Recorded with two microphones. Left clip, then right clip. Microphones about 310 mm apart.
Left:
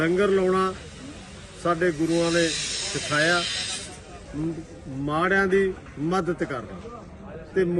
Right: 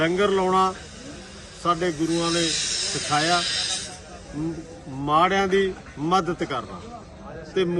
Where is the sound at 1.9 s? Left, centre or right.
Right.